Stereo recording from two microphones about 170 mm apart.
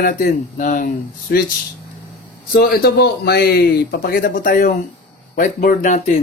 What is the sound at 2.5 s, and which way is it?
A man's voice, 65° left (ahead or behind).